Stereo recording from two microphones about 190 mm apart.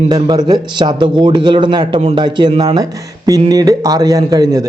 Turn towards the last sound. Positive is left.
turn(degrees=-20)  # may be behind; listen again after turning